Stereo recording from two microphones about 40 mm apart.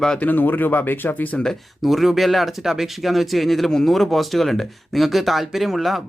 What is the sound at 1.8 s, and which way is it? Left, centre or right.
Speech, centre.